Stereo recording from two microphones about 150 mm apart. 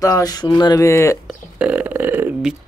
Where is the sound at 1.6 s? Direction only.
10° right (ahead or behind).